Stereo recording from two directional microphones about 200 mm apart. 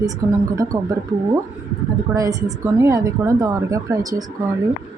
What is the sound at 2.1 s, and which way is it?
A woman's voice, 15° right (ahead or behind).